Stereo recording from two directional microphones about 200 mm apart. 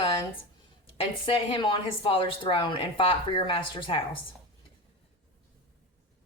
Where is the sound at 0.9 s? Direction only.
30° left (ahead or behind).